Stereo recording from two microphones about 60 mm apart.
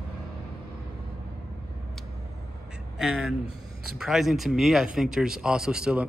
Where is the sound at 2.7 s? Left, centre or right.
Centre.